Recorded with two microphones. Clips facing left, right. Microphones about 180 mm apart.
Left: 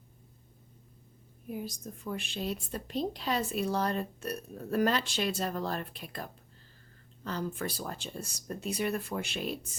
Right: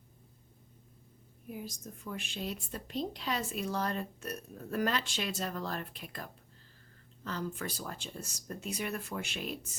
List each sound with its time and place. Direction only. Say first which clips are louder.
1.6 s a woman's voice: left 4 dB; 35° left (ahead or behind)